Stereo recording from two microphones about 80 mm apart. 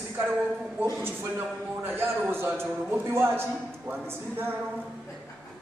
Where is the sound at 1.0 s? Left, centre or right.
Right.